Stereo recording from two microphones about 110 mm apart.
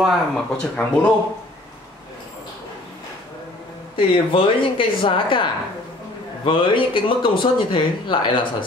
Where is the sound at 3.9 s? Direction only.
55° left (ahead or behind).